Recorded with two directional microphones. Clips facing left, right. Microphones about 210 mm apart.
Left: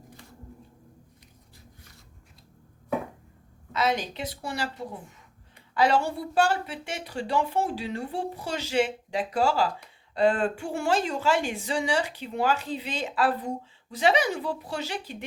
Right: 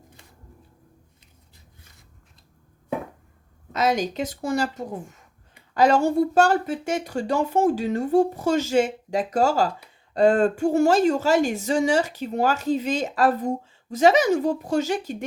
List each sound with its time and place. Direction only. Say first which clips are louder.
3.7 s speech: right 4 dB; 45° right (ahead or behind)